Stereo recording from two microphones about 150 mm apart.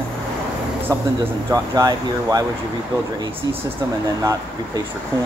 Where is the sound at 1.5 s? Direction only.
25° right (ahead or behind).